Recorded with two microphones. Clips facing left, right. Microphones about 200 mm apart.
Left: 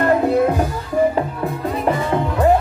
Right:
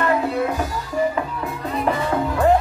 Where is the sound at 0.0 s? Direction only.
50° left (ahead or behind).